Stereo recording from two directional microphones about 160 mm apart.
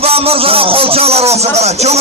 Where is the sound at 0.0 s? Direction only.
40° right (ahead or behind).